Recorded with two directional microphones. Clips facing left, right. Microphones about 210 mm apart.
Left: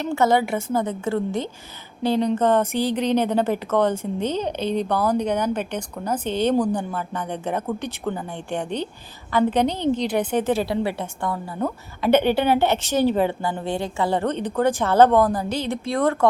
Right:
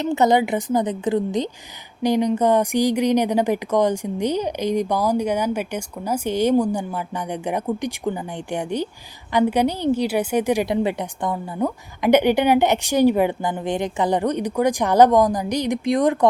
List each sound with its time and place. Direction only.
0.0 s speech: 20° right (ahead or behind)